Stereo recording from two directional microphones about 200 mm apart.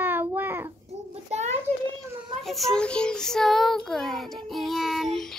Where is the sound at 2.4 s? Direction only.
Centre (ahead or behind).